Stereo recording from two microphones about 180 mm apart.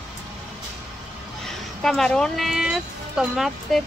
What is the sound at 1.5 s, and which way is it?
Speech, 5° left (ahead or behind).